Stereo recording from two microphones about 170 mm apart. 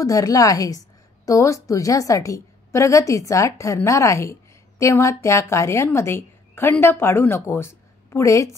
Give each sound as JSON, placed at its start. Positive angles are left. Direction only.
{"t": 0.0, "sound": "a woman's voice", "side_deg": 20}